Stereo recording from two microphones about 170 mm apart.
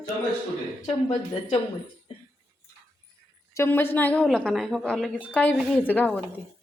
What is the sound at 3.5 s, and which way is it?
Speech, 15° left (ahead or behind).